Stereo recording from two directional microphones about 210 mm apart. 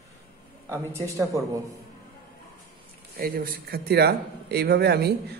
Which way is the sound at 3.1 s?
45° right (ahead or behind).